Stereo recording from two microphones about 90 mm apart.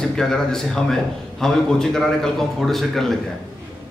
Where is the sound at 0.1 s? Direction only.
5° left (ahead or behind).